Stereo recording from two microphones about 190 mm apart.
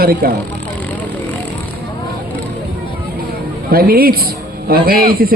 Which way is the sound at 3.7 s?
50° right (ahead or behind).